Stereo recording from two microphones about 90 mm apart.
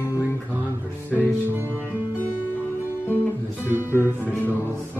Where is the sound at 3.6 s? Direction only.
20° right (ahead or behind).